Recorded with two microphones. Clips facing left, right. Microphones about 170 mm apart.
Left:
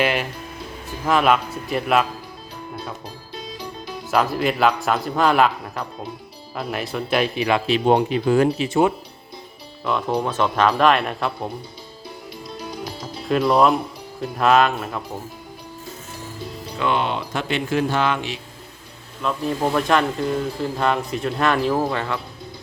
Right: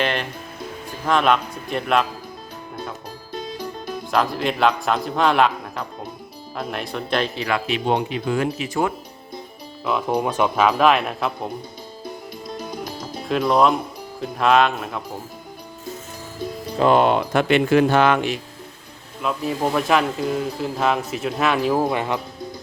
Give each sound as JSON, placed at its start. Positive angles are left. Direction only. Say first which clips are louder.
{"t": 0.0, "sound": "speech", "louder": "left 2 dB", "side_deg": 5}
{"t": 4.1, "sound": "speech", "louder": "left 2 dB", "side_deg": 5}
{"t": 7.7, "sound": "speech", "louder": "left 6 dB", "side_deg": 40}
{"t": 10.1, "sound": "speech", "louder": "right 2 dB", "side_deg": -10}
{"t": 12.5, "sound": "music", "louder": "right 1 dB", "side_deg": -45}
{"t": 13.2, "sound": "speech", "louder": "left 1 dB", "side_deg": 0}
{"t": 16.7, "sound": "speech", "louder": "right 6 dB", "side_deg": -40}
{"t": 19.2, "sound": "speech", "louder": "even", "side_deg": -5}